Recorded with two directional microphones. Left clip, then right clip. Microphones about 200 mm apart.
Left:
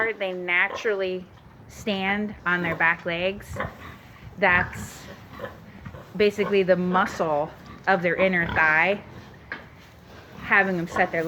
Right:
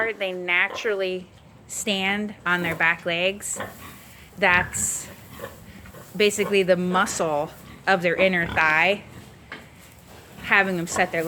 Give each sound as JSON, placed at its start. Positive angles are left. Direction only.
{"t": 0.0, "sound": "a woman's voice", "side_deg": -15}
{"t": 6.1, "sound": "a woman's voice", "side_deg": -20}
{"t": 10.4, "sound": "a woman's voice", "side_deg": -15}